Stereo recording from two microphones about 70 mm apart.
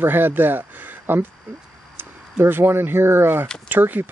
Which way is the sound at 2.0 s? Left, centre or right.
Right.